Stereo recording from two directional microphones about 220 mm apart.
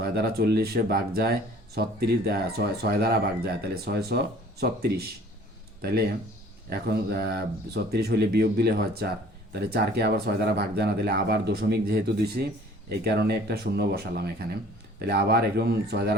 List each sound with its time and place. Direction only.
0.0 s speech: 45° right (ahead or behind)